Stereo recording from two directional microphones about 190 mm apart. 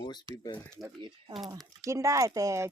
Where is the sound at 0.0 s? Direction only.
20° left (ahead or behind).